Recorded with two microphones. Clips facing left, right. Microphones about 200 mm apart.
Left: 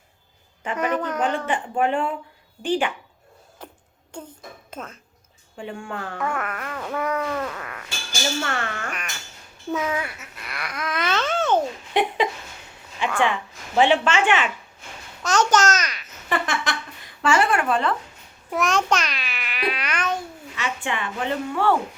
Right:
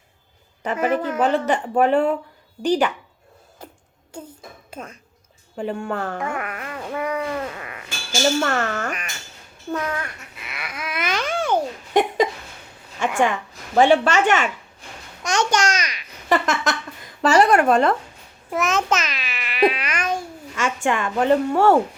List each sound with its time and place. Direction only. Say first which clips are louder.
0.8 s a woman's voice: right 3 dB; 5° right (ahead or behind)
1.2 s speech: right 5 dB; 40° right (ahead or behind)
4.1 s speech: right 1 dB; 10° right (ahead or behind)
5.5 s speech: right 7 dB; 40° right (ahead or behind)
6.3 s a sound: even; 10° right (ahead or behind)
8.4 s speech: right 6 dB; 40° right (ahead or behind)
9.7 s speech: left 1 dB; 5° left (ahead or behind); by 11.6 s 10° right (ahead or behind)
11.9 s a woman's voice: right 4 dB; 45° right (ahead or behind)
15.2 s a child's voice: left 1 dB; 10° right (ahead or behind)
16.3 s a woman's voice: right 5 dB; 40° right (ahead or behind)
18.5 s insect: right 1 dB; centre (ahead or behind)
20.6 s a woman's voice: right 6 dB; 45° right (ahead or behind)